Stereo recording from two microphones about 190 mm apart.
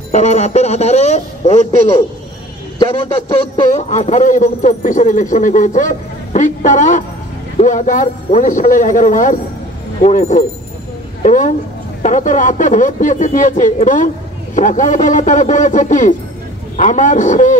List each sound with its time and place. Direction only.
0.1 s a man's voice: 40° left (ahead or behind)
3.7 s a man's voice: 35° left (ahead or behind)